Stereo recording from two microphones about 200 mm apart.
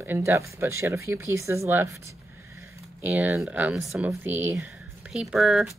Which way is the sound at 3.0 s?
5° right (ahead or behind).